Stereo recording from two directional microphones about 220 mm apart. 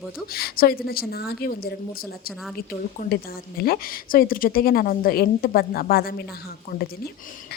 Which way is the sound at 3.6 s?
40° left (ahead or behind).